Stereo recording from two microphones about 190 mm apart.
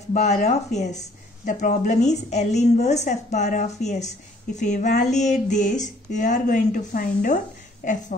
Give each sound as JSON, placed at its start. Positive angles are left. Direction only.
{"t": 0.1, "sound": "a woman's voice", "side_deg": 35}